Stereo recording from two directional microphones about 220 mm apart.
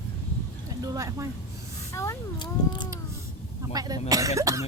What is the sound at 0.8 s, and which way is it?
Vehicle, 15° right (ahead or behind).